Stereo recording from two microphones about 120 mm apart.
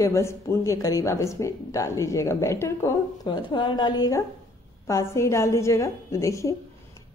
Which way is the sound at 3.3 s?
40° left (ahead or behind).